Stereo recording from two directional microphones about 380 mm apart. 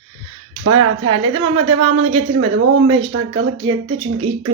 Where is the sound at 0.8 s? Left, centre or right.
Right.